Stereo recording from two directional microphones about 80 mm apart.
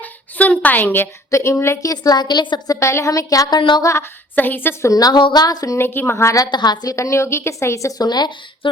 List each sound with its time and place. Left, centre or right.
0.0 s a woman's voice: centre
1.3 s a woman's voice: left
1.9 s a woman's voice: left
2.6 s a woman's voice: left
3.5 s a sound: left
3.8 s a woman's voice: left
4.4 s a woman's voice: left
4.9 s speech: left
5.1 s a woman's voice: left
5.7 s a woman's voice: left
6.3 s a woman's voice: left
6.9 s a woman's voice: left